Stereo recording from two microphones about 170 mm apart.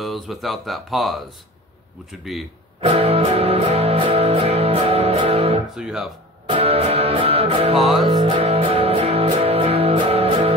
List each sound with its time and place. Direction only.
0.0 s speech: centre (ahead or behind)
2.3 s speech: centre (ahead or behind)
2.8 s music: 35° right (ahead or behind)
5.8 s speech: 5° right (ahead or behind)
6.4 s music: 35° right (ahead or behind)